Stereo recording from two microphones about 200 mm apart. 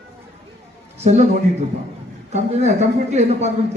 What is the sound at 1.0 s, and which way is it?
Speech, 35° right (ahead or behind).